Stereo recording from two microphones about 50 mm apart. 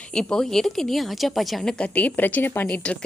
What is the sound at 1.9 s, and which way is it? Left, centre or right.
Speech, left.